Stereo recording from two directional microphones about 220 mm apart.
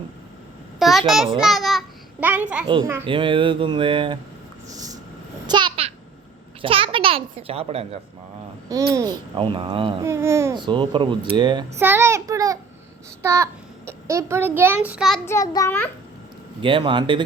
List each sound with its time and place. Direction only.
0.8 s a sound: centre (ahead or behind)
1.4 s a child's voice: centre (ahead or behind)
2.6 s a child's voice: 20° right (ahead or behind)
4.7 s a sound: 15° right (ahead or behind)
5.5 s babbling: 20° right (ahead or behind)
6.6 s a child's voice: 25° right (ahead or behind)
8.9 s a child's voice: 15° right (ahead or behind)
10.0 s a child's voice: 10° right (ahead or behind)
11.8 s child singing: 10° right (ahead or behind)
13.2 s a child's voice: 15° right (ahead or behind)
15.3 s a child's voice: 15° left (ahead or behind)
16.6 s a child's voice: 25° right (ahead or behind)